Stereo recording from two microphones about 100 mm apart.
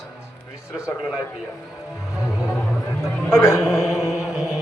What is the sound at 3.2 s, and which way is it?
Speech, 30° left (ahead or behind).